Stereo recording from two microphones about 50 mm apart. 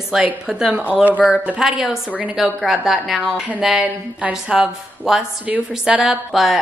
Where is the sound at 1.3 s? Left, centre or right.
Right.